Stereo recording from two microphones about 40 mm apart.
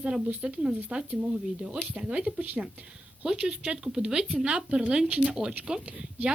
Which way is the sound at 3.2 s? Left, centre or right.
Centre.